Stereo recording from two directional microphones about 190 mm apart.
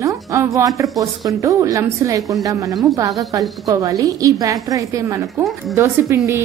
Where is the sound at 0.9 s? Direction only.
15° right (ahead or behind).